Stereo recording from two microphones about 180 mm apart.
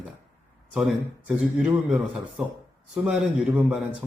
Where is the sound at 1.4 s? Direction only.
5° right (ahead or behind).